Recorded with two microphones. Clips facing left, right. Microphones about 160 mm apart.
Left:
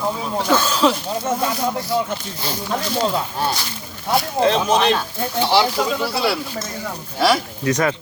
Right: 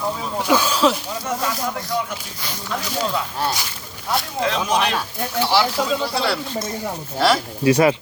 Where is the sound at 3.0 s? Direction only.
Centre (ahead or behind).